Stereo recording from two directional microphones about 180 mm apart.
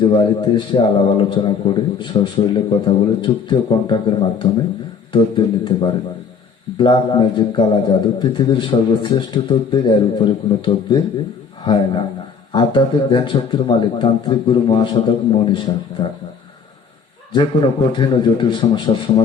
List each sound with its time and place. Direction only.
0.0 s a man's voice: 25° left (ahead or behind)
17.3 s a man's voice: 25° left (ahead or behind)